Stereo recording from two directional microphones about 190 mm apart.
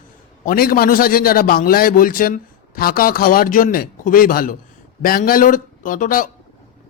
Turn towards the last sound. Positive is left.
turn(degrees=45)  # may be behind; listen again after turning